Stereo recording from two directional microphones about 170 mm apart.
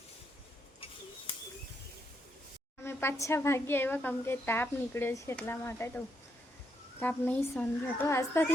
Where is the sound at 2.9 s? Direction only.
15° left (ahead or behind).